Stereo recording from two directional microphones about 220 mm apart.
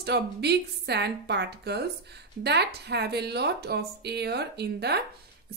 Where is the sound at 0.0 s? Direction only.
50° right (ahead or behind).